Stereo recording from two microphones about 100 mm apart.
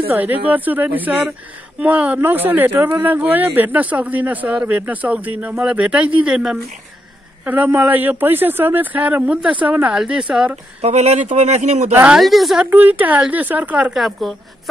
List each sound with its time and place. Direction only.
0.1 s speech: 15° right (ahead or behind)
10.8 s speech: 90° right
11.9 s speech: 15° right (ahead or behind)
12.2 s a woman's voice: centre (ahead or behind)
12.6 s speech: 20° right (ahead or behind); by 14.3 s centre (ahead or behind)